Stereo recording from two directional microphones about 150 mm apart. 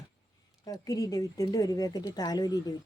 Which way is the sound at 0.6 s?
25° left (ahead or behind).